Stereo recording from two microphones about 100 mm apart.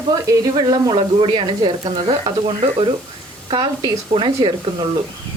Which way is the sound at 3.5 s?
50° right (ahead or behind).